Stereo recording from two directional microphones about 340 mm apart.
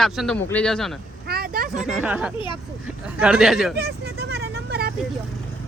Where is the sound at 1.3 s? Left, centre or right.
Right.